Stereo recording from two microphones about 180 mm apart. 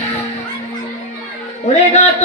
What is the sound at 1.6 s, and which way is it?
Speech, 40° left (ahead or behind).